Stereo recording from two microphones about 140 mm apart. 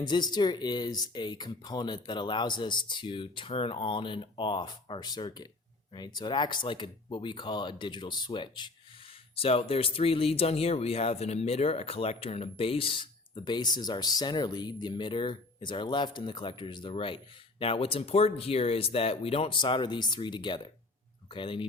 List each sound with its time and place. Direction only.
0.0 s speech: 30° left (ahead or behind)